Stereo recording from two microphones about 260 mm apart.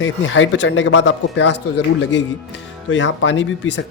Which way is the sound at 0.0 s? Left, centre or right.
Left.